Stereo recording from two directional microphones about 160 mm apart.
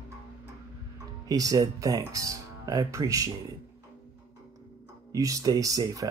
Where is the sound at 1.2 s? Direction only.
25° right (ahead or behind).